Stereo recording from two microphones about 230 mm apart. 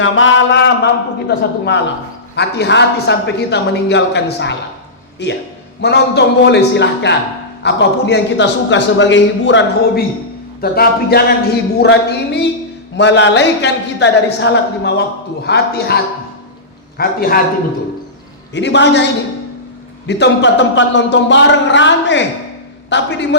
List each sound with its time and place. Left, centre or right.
0.0 s a sound: left
1.4 s a man's voice: left
17.0 s a man's voice: left
18.5 s a man's voice: left
20.1 s a man's voice: left